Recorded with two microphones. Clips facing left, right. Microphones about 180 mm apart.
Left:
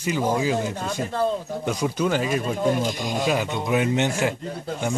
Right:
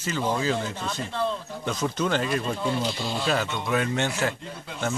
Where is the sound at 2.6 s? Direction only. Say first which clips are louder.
Left 5 dB; 45° left (ahead or behind).